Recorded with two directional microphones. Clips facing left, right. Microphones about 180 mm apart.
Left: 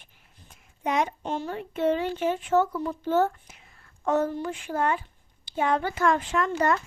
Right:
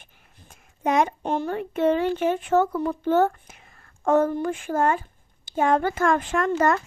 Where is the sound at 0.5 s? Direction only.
45° right (ahead or behind).